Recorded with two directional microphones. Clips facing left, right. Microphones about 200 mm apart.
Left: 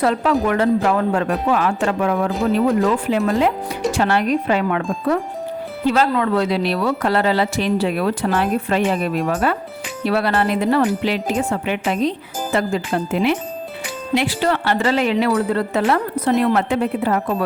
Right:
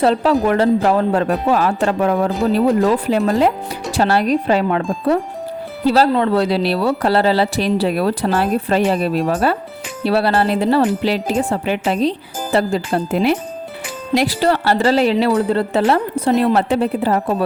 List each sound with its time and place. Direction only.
0.0 s speech: 30° right (ahead or behind)